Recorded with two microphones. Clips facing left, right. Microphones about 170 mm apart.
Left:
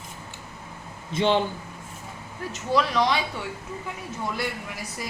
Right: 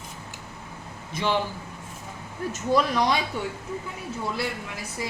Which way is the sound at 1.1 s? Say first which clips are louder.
Left 4 dB; 25° left (ahead or behind).